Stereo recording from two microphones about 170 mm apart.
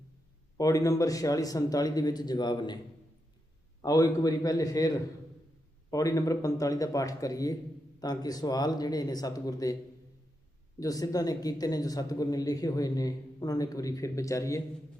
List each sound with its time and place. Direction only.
0.5 s a man's voice: 20° left (ahead or behind)
3.8 s a man's voice: 20° left (ahead or behind)
10.8 s a man's voice: 20° left (ahead or behind)